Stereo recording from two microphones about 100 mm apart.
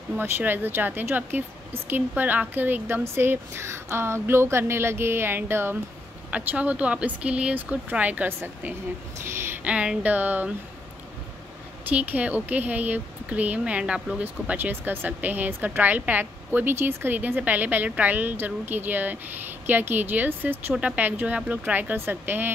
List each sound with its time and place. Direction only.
0.1 s a woman's voice: 20° right (ahead or behind)
9.2 s a woman's voice: 25° right (ahead or behind)
9.7 s speech: 10° right (ahead or behind)
11.9 s a woman's voice: 15° right (ahead or behind)